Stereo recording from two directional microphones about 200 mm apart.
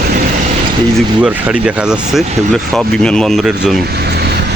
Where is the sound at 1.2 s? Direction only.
5° right (ahead or behind).